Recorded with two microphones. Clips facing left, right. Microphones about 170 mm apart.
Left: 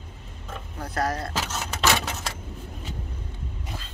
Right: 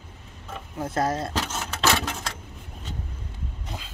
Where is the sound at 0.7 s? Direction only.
20° right (ahead or behind).